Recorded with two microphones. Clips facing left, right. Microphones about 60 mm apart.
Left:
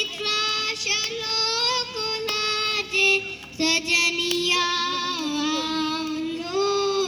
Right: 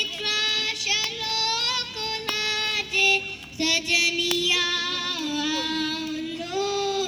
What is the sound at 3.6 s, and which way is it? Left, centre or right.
Music, left.